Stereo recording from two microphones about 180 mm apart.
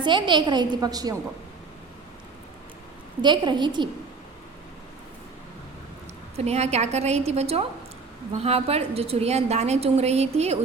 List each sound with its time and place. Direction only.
0.0 s a woman's voice: 25° right (ahead or behind)
3.2 s a woman's voice: 25° right (ahead or behind)
6.3 s a woman's voice: 35° right (ahead or behind)